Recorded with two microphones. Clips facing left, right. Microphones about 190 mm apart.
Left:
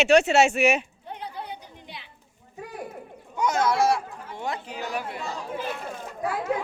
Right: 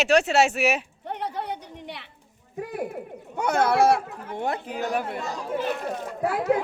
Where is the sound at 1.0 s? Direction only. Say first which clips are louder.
Right 6 dB; 70° right (ahead or behind).